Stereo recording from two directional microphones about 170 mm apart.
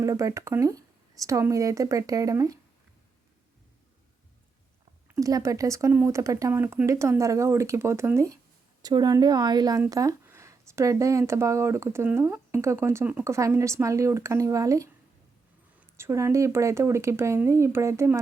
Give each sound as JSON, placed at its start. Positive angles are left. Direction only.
{"t": 0.0, "sound": "speech", "side_deg": -20}
{"t": 5.0, "sound": "speech", "side_deg": -20}
{"t": 16.0, "sound": "speech", "side_deg": -15}